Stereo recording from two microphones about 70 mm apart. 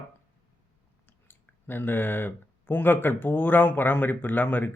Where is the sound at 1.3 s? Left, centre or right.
Left.